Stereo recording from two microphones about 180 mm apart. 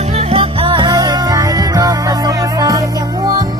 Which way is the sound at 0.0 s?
35° right (ahead or behind).